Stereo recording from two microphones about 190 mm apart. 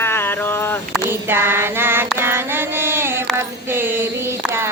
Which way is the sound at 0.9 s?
10° right (ahead or behind).